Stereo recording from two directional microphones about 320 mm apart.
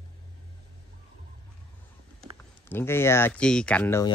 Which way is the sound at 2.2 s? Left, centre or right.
Centre.